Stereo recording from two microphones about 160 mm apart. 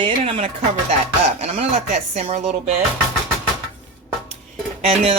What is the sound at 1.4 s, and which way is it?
Speech, 40° right (ahead or behind).